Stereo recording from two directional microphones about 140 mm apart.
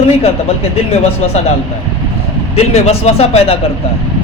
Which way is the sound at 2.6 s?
50° left (ahead or behind).